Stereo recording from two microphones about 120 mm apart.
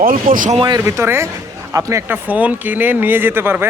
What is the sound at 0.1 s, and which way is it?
Speech, 90° right.